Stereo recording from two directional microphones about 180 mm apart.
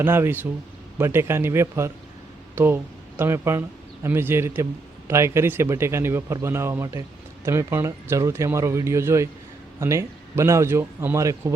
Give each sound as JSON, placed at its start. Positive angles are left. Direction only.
{"t": 0.0, "sound": "speech", "side_deg": -10}